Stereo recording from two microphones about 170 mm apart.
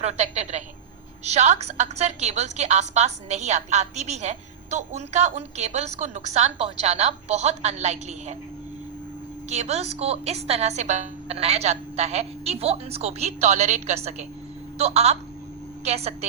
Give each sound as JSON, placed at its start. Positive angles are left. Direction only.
{"t": 0.0, "sound": "a woman's voice", "side_deg": -40}
{"t": 9.5, "sound": "a woman's voice", "side_deg": -40}